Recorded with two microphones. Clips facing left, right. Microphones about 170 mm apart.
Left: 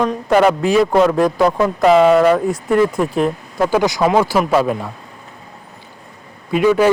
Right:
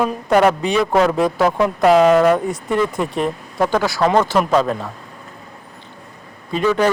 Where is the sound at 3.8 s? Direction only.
20° left (ahead or behind).